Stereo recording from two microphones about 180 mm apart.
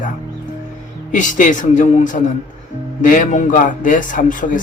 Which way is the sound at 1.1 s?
45° left (ahead or behind).